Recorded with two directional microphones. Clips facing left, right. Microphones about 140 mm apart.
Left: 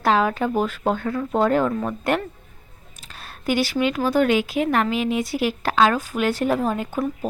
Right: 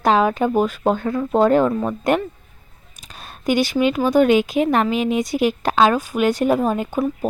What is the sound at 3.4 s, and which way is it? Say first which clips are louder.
Speech: right 3 dB; 20° right (ahead or behind).